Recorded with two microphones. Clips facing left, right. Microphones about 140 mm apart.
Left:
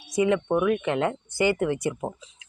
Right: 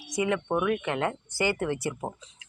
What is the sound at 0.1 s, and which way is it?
Speech, 25° left (ahead or behind).